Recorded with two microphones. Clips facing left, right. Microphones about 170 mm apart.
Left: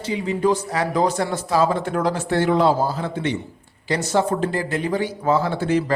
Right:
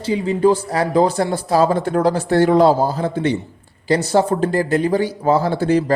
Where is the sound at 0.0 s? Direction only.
35° right (ahead or behind).